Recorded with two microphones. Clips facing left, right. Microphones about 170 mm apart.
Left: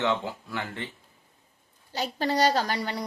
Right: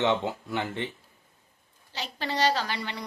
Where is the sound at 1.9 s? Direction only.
45° left (ahead or behind).